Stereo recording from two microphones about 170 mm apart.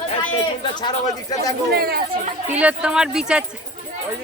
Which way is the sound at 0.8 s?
25° left (ahead or behind).